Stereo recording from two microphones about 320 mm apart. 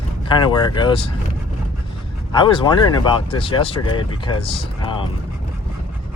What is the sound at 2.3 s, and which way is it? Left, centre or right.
Speech, centre.